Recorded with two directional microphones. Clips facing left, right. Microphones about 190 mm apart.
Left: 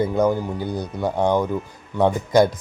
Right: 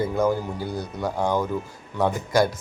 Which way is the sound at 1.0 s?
20° left (ahead or behind).